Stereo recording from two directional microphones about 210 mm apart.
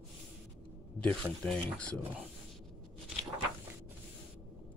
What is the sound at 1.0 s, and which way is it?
Speech, 5° left (ahead or behind).